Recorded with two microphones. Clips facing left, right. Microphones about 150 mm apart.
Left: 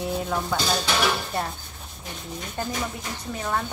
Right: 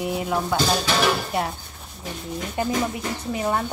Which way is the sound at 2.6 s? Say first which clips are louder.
Right 6 dB; 10° right (ahead or behind).